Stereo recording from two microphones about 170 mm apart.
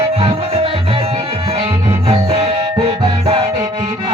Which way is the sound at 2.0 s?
30° right (ahead or behind).